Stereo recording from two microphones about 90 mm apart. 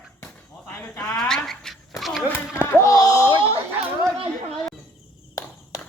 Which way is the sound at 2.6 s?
40° left (ahead or behind).